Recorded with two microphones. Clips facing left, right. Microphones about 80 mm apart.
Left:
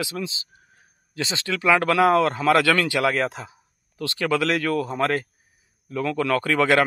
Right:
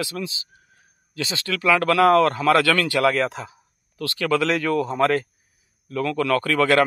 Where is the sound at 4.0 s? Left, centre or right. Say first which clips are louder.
Even; left.